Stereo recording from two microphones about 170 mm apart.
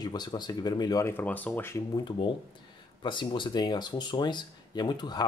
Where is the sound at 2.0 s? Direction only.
30° left (ahead or behind).